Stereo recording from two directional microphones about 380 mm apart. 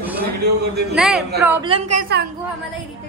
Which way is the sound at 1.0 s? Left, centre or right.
Centre.